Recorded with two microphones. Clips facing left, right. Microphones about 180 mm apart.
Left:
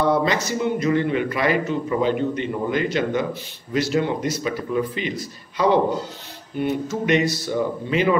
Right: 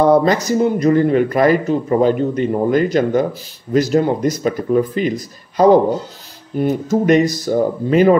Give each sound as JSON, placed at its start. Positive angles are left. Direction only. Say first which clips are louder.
{"t": 0.0, "sound": "a man's voice", "louder": "right 7 dB", "side_deg": -45}